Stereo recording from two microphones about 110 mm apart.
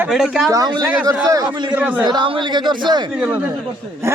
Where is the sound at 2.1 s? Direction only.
45° right (ahead or behind).